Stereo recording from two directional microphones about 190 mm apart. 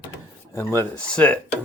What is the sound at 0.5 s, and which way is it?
Speech, 15° left (ahead or behind).